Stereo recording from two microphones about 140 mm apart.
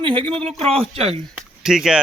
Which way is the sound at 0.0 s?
40° right (ahead or behind).